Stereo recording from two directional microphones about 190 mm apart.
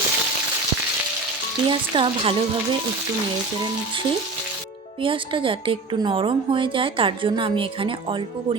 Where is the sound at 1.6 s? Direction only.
25° right (ahead or behind).